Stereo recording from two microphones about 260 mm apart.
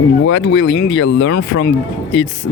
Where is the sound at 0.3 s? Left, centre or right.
Left.